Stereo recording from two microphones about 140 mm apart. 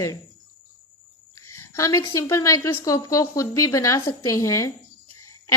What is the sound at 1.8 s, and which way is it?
A woman's voice, 25° left (ahead or behind).